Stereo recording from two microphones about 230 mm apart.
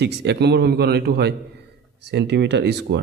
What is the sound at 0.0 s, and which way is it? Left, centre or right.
A man's voice, right.